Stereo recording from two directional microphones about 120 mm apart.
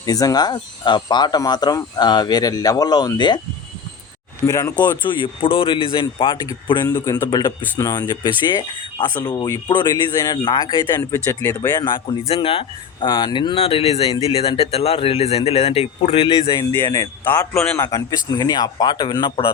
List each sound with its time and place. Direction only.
0.0 s speech: 30° left (ahead or behind)
4.4 s speech: 30° left (ahead or behind)
5.2 s speech: 50° left (ahead or behind)
11.1 s speech: 25° left (ahead or behind)
12.3 s speech: 50° left (ahead or behind)
16.7 s speech: 20° left (ahead or behind)
17.5 s a man's voice: 5° left (ahead or behind)
17.7 s speech: 30° left (ahead or behind)